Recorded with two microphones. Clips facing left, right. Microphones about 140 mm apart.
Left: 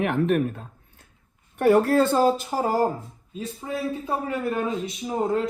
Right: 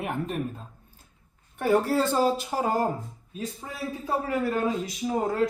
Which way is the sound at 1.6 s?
60° left (ahead or behind).